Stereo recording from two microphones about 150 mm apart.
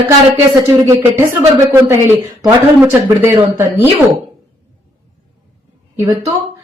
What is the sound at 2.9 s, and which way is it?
Speech, 15° right (ahead or behind).